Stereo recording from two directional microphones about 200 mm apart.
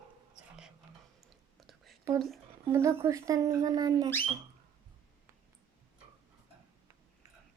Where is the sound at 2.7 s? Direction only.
10° right (ahead or behind).